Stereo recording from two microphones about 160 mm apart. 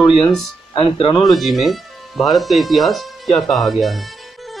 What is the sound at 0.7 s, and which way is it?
Speech, 35° left (ahead or behind).